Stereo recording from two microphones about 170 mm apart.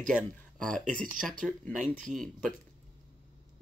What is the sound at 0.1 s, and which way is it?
Speech, centre (ahead or behind).